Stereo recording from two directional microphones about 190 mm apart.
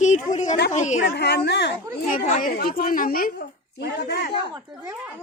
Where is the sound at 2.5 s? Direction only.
55° left (ahead or behind).